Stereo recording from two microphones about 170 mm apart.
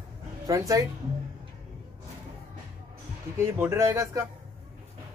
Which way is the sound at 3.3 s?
15° right (ahead or behind).